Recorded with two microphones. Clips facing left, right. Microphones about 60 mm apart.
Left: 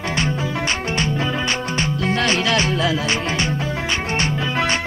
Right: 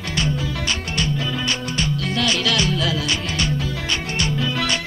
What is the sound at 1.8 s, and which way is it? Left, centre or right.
Music, left.